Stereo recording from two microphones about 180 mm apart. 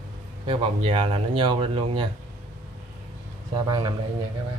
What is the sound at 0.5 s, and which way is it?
Speech, 30° right (ahead or behind).